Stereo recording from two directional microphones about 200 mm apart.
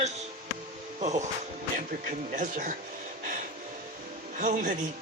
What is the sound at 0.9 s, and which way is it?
Speech, 35° right (ahead or behind).